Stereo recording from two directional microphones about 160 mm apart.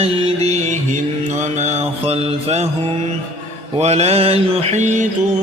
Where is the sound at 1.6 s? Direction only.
45° right (ahead or behind).